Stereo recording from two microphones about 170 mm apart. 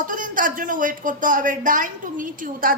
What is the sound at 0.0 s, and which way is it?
A woman's voice, 50° right (ahead or behind).